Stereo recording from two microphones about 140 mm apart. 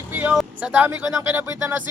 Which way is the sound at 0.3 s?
10° right (ahead or behind).